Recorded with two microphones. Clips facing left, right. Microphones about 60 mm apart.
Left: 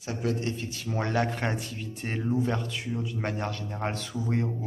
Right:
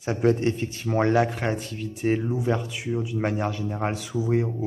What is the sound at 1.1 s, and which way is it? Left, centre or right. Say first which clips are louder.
Speech: right 5 dB; centre.